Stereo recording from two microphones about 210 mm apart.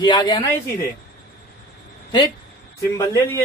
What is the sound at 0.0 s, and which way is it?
Speech, 20° left (ahead or behind).